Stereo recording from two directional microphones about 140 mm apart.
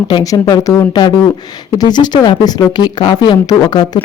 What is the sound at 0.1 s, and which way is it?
Speech, 25° left (ahead or behind).